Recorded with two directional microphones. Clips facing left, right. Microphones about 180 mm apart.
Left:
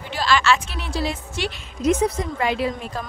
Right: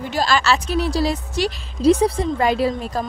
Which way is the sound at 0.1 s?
40° right (ahead or behind).